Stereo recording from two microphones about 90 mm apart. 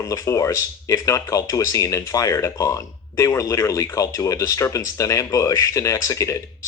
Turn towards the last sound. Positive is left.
turn(degrees=35)  # may be behind; listen again after turning